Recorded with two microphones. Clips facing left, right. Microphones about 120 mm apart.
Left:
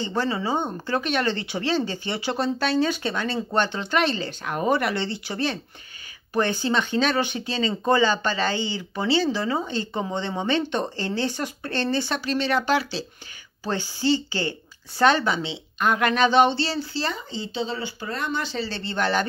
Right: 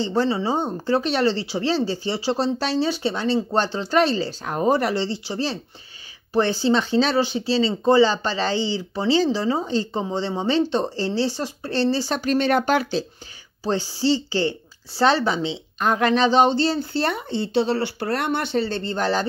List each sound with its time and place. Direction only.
0.0 s speech: 35° right (ahead or behind)
13.7 s speech: 35° right (ahead or behind)